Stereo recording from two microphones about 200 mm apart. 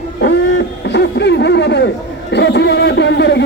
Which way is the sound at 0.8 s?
60° left (ahead or behind).